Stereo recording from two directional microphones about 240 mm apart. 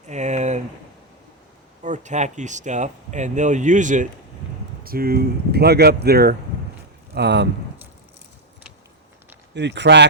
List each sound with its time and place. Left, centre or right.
0.1 s a sound: right
1.8 s speech: right
9.6 s speech: right